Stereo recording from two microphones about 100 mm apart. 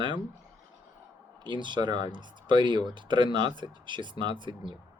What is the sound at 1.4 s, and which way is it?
Speech, 50° right (ahead or behind).